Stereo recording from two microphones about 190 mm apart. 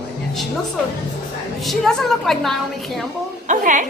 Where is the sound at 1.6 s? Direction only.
Centre (ahead or behind).